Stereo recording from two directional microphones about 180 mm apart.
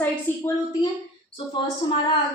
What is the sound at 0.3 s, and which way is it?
Speech, 10° left (ahead or behind).